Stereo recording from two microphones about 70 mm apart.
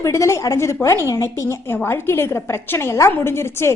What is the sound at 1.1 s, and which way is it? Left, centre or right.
Speech, left.